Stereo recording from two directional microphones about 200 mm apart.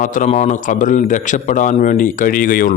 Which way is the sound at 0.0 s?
40° left (ahead or behind).